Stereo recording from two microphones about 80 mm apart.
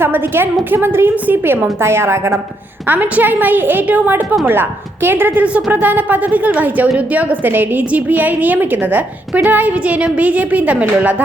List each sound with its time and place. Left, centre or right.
0.0 s a woman's voice: right
2.8 s a woman's voice: right